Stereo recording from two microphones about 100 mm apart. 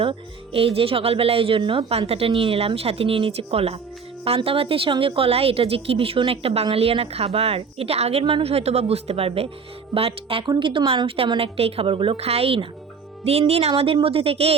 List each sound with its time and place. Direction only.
0.0 s speech: 65° right (ahead or behind); by 3.8 s 80° right
4.4 s speech: 65° right (ahead or behind); by 8.2 s 85° right
8.2 s a woman's voice: 65° right (ahead or behind)
13.5 s speech: 90° right